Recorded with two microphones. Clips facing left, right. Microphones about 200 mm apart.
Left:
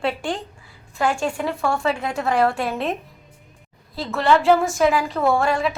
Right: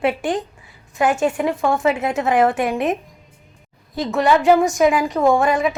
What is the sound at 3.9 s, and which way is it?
A woman's voice, 15° right (ahead or behind).